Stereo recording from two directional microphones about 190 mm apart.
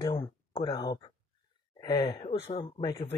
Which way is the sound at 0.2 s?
30° left (ahead or behind).